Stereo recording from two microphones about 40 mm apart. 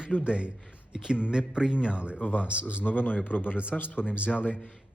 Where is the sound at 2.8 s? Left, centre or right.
Left.